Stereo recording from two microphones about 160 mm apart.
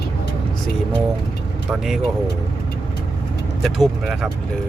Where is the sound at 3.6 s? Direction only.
Centre (ahead or behind).